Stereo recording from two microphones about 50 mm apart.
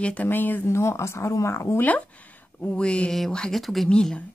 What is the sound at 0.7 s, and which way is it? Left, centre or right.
Speech, left.